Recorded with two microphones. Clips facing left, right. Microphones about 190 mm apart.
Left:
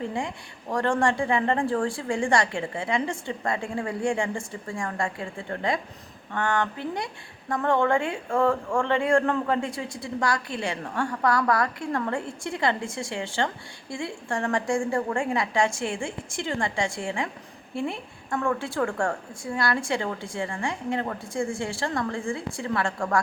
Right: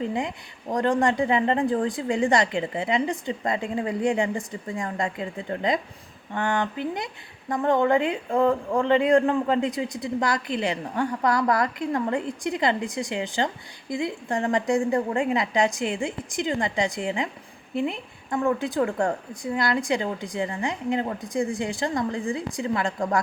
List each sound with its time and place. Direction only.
0.1 s speech: 20° right (ahead or behind)